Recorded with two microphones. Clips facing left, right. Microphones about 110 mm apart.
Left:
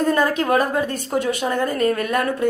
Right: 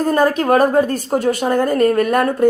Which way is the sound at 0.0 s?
45° right (ahead or behind).